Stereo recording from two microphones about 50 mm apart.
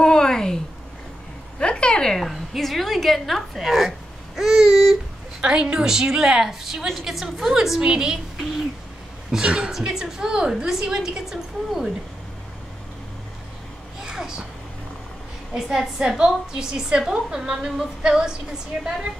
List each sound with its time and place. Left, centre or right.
0.0 s a sound: centre
1.6 s a sound: centre
2.1 s a woman's voice: centre
4.4 s babbling: centre
5.4 s a woman's voice: centre
9.4 s a woman's voice: right
9.7 s a woman's voice: centre
14.0 s a sound: centre
15.5 s a woman's voice: centre